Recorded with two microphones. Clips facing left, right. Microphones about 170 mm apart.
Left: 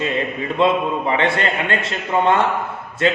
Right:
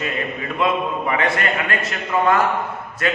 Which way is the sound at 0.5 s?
30° left (ahead or behind).